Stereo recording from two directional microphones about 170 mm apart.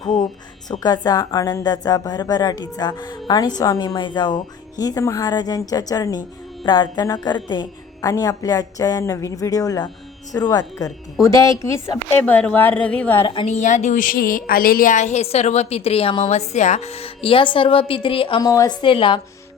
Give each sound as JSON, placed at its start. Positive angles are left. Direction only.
{"t": 0.0, "sound": "a woman's voice", "side_deg": 25}
{"t": 13.2, "sound": "a woman's voice", "side_deg": 30}
{"t": 13.6, "sound": "a woman's voice", "side_deg": 45}